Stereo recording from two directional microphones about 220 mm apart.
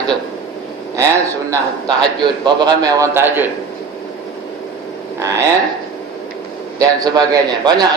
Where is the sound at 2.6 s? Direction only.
15° right (ahead or behind).